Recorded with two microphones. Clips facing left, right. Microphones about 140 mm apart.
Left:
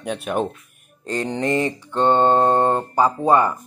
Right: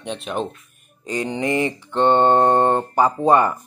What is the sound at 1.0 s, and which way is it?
Mantra, 5° right (ahead or behind).